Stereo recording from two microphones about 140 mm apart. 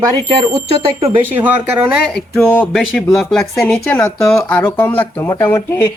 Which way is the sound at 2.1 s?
5° left (ahead or behind).